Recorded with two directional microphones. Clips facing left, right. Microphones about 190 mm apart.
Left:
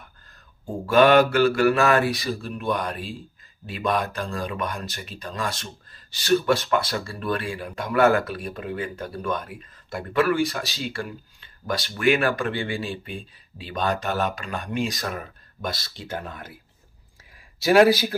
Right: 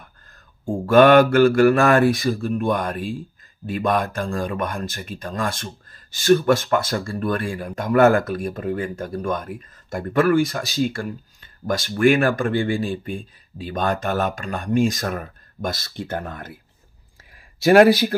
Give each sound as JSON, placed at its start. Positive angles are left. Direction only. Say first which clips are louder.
{"t": 0.8, "sound": "speech", "louder": "right 4 dB", "side_deg": -50}
{"t": 17.6, "sound": "speech", "louder": "right 4 dB", "side_deg": -55}